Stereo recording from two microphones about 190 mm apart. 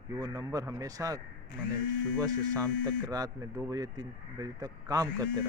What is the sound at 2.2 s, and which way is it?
Speech, 20° right (ahead or behind).